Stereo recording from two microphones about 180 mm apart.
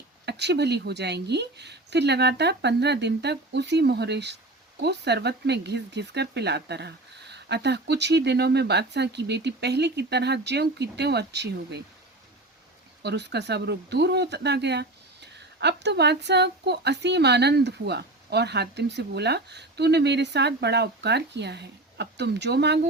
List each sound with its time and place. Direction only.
0.3 s speech: 70° right (ahead or behind)
13.0 s speech: 70° right (ahead or behind)